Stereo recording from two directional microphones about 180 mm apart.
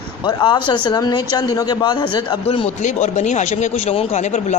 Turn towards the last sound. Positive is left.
turn(degrees=40)  # may be behind; listen again after turning